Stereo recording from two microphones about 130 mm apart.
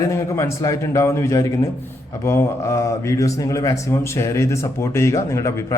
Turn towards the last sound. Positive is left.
turn(degrees=25)  # may be behind; listen again after turning